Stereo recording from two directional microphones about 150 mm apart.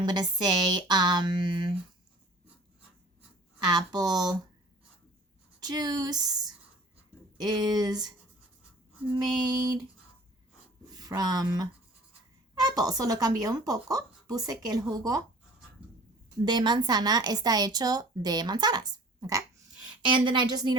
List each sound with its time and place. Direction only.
0.0 s speech: 30° right (ahead or behind)
3.7 s speech: 25° right (ahead or behind)
5.5 s speech: 25° right (ahead or behind)
9.1 s speech: 25° right (ahead or behind)
10.8 s speech: 25° right (ahead or behind)
16.4 s a woman's voice: 30° right (ahead or behind)